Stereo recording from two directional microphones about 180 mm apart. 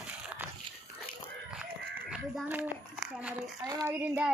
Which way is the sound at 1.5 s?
5° right (ahead or behind).